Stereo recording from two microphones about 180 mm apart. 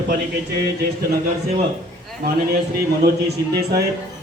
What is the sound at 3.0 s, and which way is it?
Speech, 60° right (ahead or behind).